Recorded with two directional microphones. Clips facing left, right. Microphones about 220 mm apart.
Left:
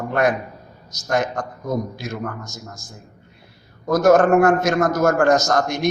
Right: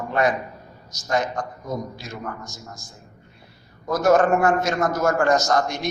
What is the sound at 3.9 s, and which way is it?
Speech, 45° left (ahead or behind).